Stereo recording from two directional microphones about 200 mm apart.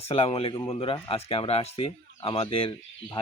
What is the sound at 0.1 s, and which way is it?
Speech, 30° left (ahead or behind).